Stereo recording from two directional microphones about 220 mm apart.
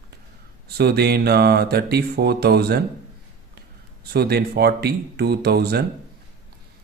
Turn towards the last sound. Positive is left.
turn(degrees=-45)  # may be behind; listen again after turning